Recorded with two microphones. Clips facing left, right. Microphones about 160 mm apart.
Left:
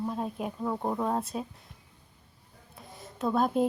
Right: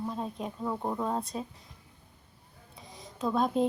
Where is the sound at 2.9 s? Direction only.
Centre (ahead or behind).